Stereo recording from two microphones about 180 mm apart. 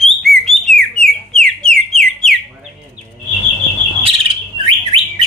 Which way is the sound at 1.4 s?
5° left (ahead or behind).